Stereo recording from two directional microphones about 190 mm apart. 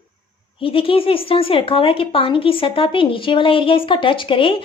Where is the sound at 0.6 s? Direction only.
30° left (ahead or behind).